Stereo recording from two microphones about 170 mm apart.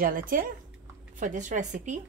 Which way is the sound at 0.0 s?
55° right (ahead or behind).